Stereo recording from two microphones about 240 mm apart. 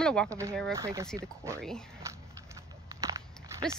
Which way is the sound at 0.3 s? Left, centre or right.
Centre.